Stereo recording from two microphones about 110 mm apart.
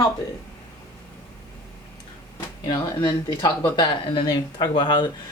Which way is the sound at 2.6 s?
40° left (ahead or behind).